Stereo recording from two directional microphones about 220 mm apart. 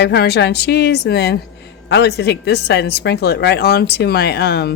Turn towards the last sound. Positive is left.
turn(degrees=50)  # may be behind; listen again after turning